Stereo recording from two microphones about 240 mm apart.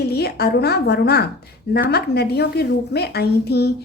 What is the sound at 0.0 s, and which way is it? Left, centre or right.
A woman's voice, left.